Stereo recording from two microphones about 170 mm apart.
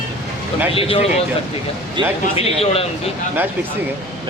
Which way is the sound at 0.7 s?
35° left (ahead or behind).